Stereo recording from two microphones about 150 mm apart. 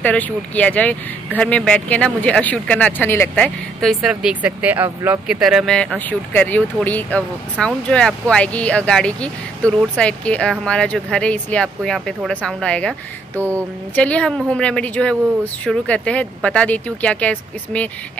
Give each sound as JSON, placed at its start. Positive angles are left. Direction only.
{"t": 0.0, "sound": "speech", "side_deg": 10}
{"t": 5.3, "sound": "speech", "side_deg": -5}
{"t": 13.4, "sound": "mantra", "side_deg": -15}
{"t": 13.9, "sound": "speech", "side_deg": 10}